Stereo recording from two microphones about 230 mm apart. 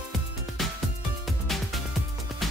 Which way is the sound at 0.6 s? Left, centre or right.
Centre.